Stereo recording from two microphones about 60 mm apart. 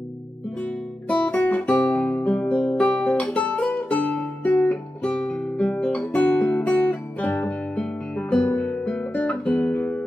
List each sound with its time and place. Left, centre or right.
1.0 s guitar: centre
2.5 s music: centre
2.9 s music: left
5.2 s guitar: centre
7.8 s music: centre
8.5 s music: left
9.1 s guitar: left